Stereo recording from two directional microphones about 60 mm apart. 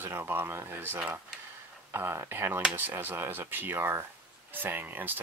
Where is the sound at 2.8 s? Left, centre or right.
Right.